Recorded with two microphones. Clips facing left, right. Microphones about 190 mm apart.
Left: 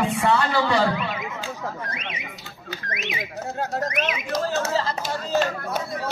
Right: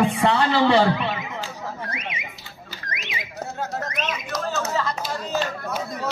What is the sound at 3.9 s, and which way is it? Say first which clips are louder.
Speech: left 2 dB; 65° left (ahead or behind).